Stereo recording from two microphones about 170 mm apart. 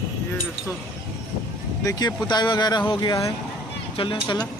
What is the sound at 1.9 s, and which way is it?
Speech, 20° left (ahead or behind).